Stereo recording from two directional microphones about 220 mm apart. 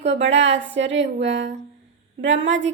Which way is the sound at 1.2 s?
55° right (ahead or behind).